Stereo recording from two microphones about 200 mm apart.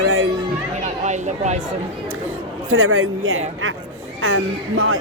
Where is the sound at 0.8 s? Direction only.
35° right (ahead or behind).